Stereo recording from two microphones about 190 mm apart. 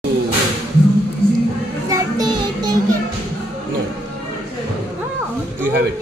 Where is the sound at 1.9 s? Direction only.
20° right (ahead or behind).